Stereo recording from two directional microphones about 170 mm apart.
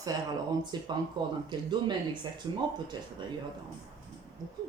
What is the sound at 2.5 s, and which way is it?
Speech, 25° right (ahead or behind).